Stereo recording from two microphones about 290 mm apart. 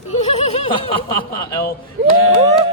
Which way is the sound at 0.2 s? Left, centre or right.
Left.